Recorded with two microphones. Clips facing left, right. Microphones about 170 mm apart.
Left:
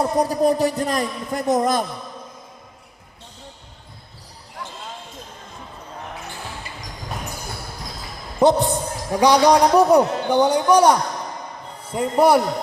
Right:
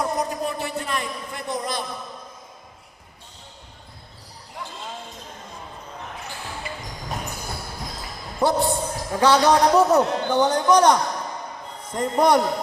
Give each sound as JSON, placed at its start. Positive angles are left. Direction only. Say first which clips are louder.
{"t": 0.0, "sound": "a man's voice", "louder": "left 7 dB", "side_deg": 35}
{"t": 8.4, "sound": "a man's voice", "louder": "left 4 dB", "side_deg": 20}